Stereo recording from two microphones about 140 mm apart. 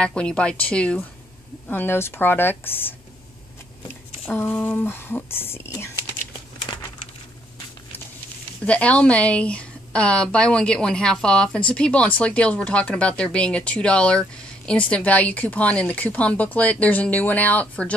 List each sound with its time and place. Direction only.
0.0 s speech: 5° left (ahead or behind)
6.7 s crumpling: 35° left (ahead or behind)
8.6 s speech: 10° left (ahead or behind)